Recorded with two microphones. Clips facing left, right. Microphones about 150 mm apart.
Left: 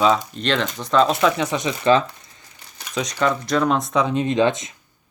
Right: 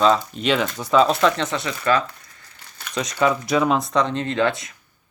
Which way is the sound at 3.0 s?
Centre (ahead or behind).